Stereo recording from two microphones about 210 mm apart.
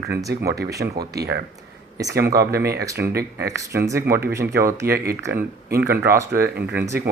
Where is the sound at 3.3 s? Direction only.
15° right (ahead or behind).